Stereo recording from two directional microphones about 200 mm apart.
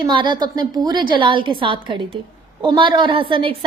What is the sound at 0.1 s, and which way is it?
A woman's voice, 25° right (ahead or behind).